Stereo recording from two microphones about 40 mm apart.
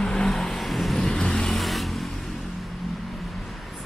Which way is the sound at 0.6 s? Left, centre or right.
Centre.